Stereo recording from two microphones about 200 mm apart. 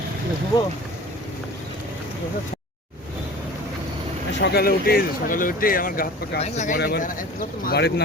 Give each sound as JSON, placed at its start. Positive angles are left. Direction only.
{"t": 4.4, "sound": "speech", "side_deg": 55}
{"t": 6.7, "sound": "speech", "side_deg": 50}